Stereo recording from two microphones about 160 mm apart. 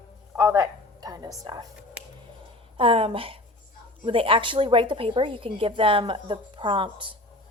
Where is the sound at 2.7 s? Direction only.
35° right (ahead or behind).